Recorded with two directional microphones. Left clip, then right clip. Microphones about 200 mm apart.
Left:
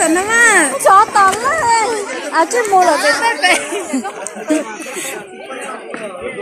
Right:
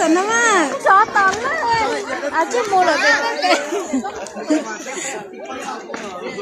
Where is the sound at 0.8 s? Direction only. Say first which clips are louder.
Left 4 dB; 25° left (ahead or behind); by 2.9 s 40° left (ahead or behind).